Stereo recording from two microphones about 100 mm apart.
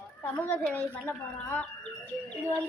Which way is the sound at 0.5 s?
15° left (ahead or behind).